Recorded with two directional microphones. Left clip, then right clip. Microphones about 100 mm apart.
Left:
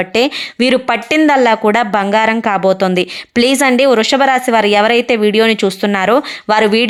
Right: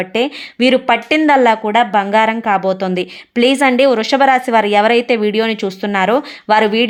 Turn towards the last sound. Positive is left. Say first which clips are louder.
# left 1 dB
turn(degrees=30)  # may be behind; listen again after turning